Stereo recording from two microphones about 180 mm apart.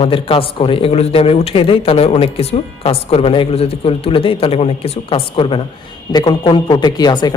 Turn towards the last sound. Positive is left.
turn(degrees=25)  # may be behind; listen again after turning